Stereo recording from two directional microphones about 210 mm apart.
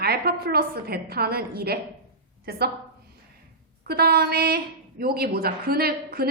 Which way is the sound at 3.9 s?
50° right (ahead or behind).